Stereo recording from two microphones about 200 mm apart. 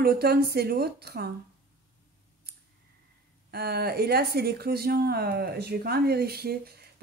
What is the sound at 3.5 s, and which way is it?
Speech, 50° right (ahead or behind).